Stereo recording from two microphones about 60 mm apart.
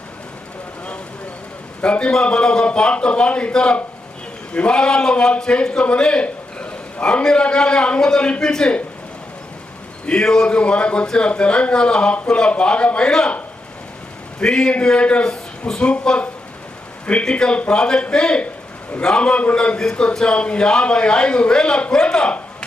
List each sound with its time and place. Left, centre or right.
1.8 s a man's voice: centre
10.1 s a man's voice: centre
14.4 s a man's voice: centre